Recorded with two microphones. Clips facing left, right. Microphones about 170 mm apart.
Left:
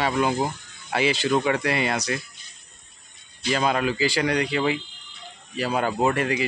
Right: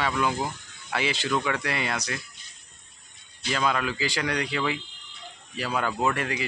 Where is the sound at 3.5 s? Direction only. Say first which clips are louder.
Left 4 dB; 30° left (ahead or behind).